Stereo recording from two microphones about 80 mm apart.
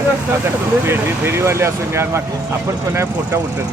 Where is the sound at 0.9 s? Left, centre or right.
Right.